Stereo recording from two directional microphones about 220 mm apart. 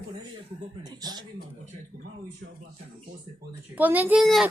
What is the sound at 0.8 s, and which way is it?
Speech, 20° right (ahead or behind).